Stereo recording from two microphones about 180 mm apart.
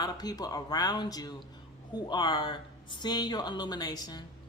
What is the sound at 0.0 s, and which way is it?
Speech, 20° left (ahead or behind).